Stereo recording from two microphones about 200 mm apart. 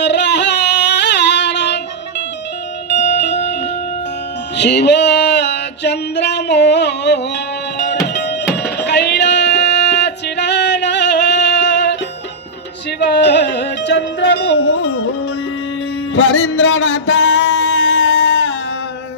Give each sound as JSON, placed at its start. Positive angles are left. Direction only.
{"t": 0.0, "sound": "music", "side_deg": 60}
{"t": 4.6, "sound": "music", "side_deg": 60}
{"t": 13.0, "sound": "music", "side_deg": 60}
{"t": 16.2, "sound": "music", "side_deg": 70}